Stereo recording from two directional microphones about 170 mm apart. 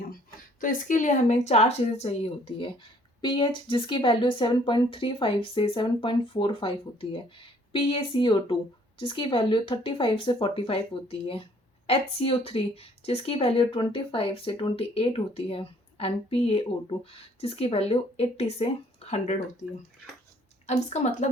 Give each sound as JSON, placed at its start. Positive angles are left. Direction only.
{"t": 0.6, "sound": "speech", "side_deg": 50}
{"t": 20.7, "sound": "a woman's voice", "side_deg": 40}